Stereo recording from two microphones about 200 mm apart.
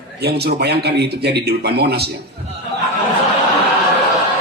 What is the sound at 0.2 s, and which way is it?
Speech, 55° right (ahead or behind).